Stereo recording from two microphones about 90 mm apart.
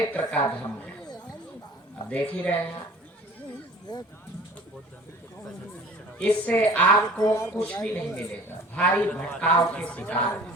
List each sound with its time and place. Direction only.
0.1 s a woman's voice: 15° left (ahead or behind)
1.0 s a sound: 45° left (ahead or behind)
2.0 s a woman's voice: 15° left (ahead or behind)
3.9 s speech: 45° left (ahead or behind)
6.1 s a woman's voice: 15° left (ahead or behind)
7.2 s speech: 45° left (ahead or behind)
7.4 s a woman's voice: 15° left (ahead or behind)